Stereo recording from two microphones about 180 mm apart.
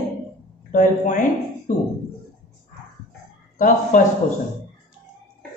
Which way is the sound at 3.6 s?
45° left (ahead or behind).